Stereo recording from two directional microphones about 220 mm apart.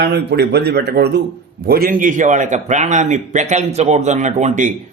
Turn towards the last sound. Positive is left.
turn(degrees=-35)  # may be behind; listen again after turning